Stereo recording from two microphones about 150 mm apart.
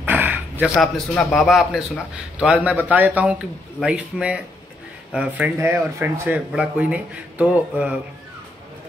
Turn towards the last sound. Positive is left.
turn(degrees=-10)  # may be behind; listen again after turning